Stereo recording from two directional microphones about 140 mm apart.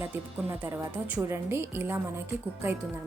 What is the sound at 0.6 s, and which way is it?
A woman's voice, 20° right (ahead or behind).